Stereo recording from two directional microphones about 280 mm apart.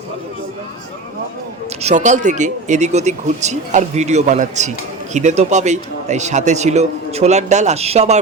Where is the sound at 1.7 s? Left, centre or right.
Right.